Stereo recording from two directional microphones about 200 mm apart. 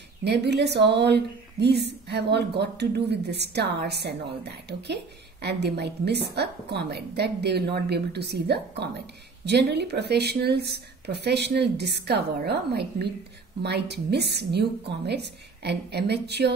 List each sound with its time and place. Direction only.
0.2 s a woman's voice: 55° right (ahead or behind)